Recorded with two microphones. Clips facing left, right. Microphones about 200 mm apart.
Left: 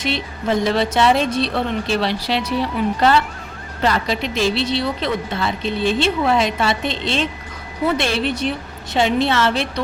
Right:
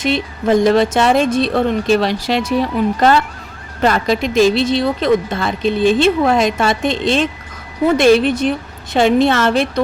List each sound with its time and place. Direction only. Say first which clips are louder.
0.0 s speech: right 6 dB; 50° right (ahead or behind)